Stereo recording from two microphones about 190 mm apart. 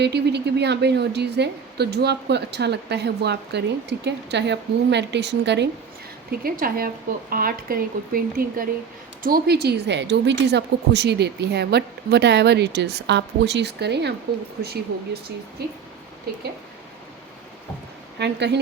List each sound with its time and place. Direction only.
0.0 s a woman's voice: 60° right (ahead or behind)
6.3 s a woman's voice: 50° right (ahead or behind)
18.2 s a woman's voice: 65° right (ahead or behind)